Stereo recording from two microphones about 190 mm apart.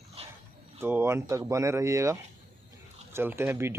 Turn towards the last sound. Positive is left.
turn(degrees=-15)  # may be behind; listen again after turning